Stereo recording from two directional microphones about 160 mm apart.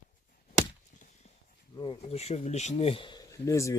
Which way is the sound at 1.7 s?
35° left (ahead or behind).